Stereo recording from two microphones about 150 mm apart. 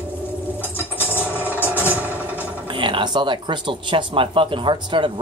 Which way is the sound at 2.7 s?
35° right (ahead or behind).